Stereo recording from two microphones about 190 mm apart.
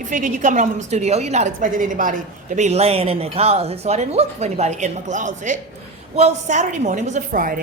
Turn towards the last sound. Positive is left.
turn(degrees=-45)  # may be behind; listen again after turning